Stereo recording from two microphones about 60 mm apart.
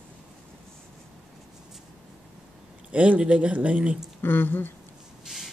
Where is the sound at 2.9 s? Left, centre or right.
Right.